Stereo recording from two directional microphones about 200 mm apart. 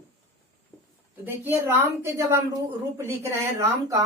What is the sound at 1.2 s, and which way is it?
A man's voice, 10° right (ahead or behind).